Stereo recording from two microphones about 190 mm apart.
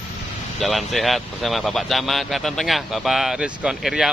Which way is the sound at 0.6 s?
Centre (ahead or behind).